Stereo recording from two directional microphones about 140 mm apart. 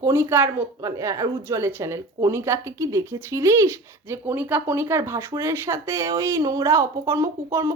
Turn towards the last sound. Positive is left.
turn(degrees=-20)  # may be behind; listen again after turning